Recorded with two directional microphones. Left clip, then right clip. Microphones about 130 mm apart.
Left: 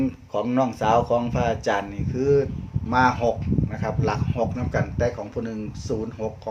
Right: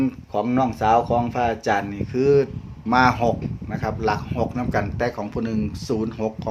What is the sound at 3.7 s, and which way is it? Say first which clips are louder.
Speech: right 5 dB; 35° right (ahead or behind).